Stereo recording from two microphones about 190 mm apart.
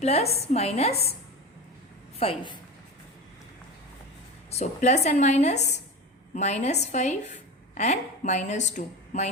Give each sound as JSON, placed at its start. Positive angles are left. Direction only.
{"t": 0.0, "sound": "a woman's voice", "side_deg": 35}
{"t": 2.1, "sound": "a woman's voice", "side_deg": 25}
{"t": 4.5, "sound": "a woman's voice", "side_deg": 35}